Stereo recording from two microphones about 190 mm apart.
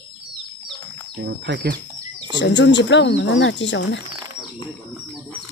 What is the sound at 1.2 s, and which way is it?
Speech, 60° right (ahead or behind).